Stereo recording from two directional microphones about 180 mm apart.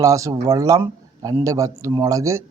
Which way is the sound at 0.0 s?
15° right (ahead or behind).